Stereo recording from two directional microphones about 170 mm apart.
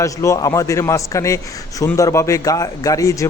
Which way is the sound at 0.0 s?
20° left (ahead or behind).